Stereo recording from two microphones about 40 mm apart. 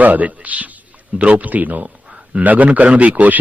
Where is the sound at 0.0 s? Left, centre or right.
Right.